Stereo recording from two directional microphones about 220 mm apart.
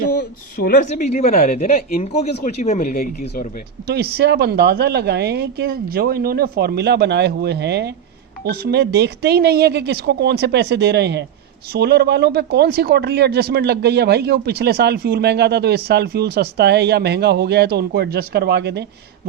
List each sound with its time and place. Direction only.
0.2 s speech: 40° left (ahead or behind)
2.0 s speech: 30° left (ahead or behind)
3.8 s speech: 45° right (ahead or behind)